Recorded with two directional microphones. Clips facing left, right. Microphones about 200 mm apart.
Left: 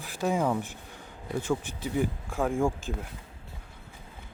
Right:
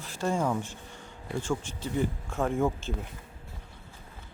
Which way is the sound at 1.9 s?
Centre (ahead or behind).